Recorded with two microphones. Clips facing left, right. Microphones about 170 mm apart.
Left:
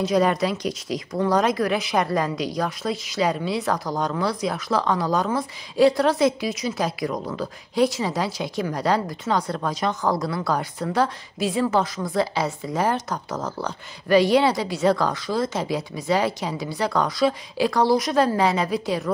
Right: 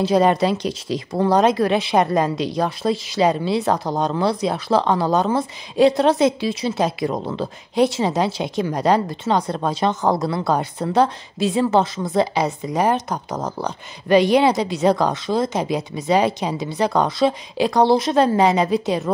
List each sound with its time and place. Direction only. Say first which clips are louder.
0.0 s speech: right 4 dB; 30° right (ahead or behind)